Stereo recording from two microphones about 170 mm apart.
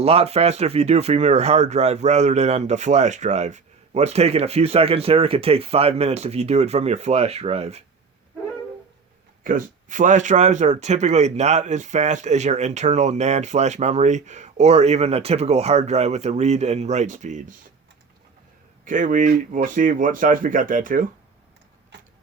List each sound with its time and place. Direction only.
0.0 s speech: 35° right (ahead or behind)
9.4 s speech: 50° right (ahead or behind)
18.9 s speech: 50° right (ahead or behind)